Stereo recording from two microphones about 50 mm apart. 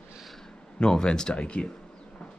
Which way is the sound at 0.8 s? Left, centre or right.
Centre.